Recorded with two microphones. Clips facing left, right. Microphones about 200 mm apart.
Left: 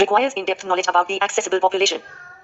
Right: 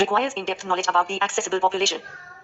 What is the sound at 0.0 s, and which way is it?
Speech, 65° left (ahead or behind).